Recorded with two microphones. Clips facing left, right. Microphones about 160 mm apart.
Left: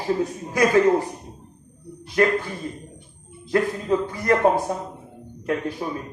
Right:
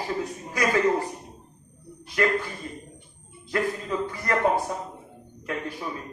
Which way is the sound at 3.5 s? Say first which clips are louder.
Left 6 dB; 40° left (ahead or behind).